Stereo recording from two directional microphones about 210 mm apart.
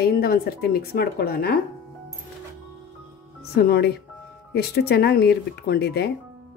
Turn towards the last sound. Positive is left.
turn(degrees=50)  # may be behind; listen again after turning